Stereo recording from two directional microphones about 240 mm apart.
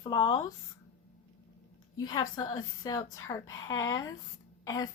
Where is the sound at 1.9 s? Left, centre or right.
Centre.